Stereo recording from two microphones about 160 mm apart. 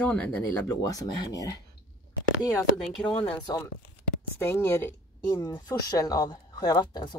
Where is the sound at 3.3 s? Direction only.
20° left (ahead or behind).